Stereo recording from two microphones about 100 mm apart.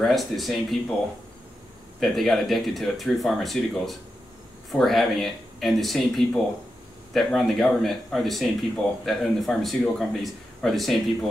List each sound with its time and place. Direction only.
0.0 s speech: centre (ahead or behind)
2.0 s speech: centre (ahead or behind)